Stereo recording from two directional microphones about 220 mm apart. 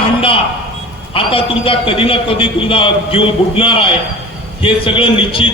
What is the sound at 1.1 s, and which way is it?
A man's voice, 25° left (ahead or behind).